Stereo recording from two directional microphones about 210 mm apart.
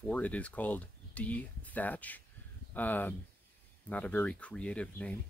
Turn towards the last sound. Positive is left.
turn(degrees=5)  # may be behind; listen again after turning